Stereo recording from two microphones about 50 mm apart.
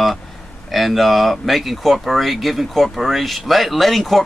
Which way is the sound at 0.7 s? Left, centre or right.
Centre.